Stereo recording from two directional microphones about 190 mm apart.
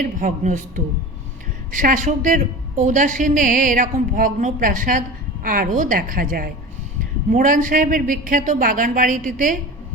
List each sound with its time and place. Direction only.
0.2 s a woman's voice: 45° right (ahead or behind)
1.7 s a woman's voice: 45° right (ahead or behind)